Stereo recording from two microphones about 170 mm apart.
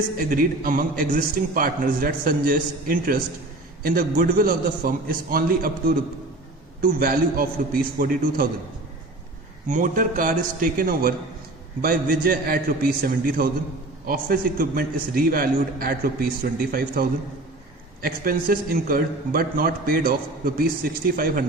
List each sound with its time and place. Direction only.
0.2 s a man's voice: 55° right (ahead or behind)
9.6 s a man's voice: 50° right (ahead or behind)